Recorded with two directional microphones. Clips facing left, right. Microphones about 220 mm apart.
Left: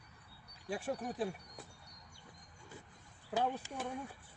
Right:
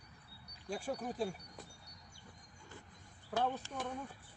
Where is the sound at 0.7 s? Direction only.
5° left (ahead or behind).